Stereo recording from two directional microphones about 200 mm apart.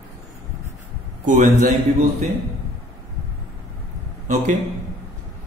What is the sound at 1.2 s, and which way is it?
Speech, 40° right (ahead or behind).